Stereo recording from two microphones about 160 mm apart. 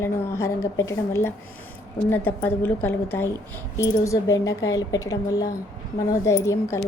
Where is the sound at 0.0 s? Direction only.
15° left (ahead or behind).